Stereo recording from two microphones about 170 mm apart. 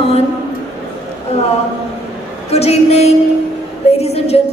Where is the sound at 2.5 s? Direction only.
40° left (ahead or behind).